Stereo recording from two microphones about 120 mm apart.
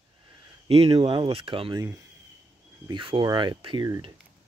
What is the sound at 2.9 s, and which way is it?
Speech, 45° right (ahead or behind).